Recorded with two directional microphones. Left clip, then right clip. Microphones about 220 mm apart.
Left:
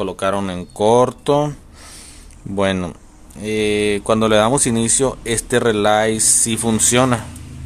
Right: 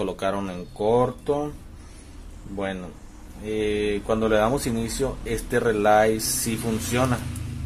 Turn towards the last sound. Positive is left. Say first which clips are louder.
# left 9 dB
turn(degrees=30)  # may be behind; listen again after turning